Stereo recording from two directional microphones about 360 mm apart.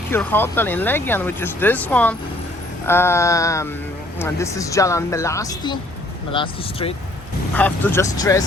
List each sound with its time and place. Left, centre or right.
0.1 s speech: centre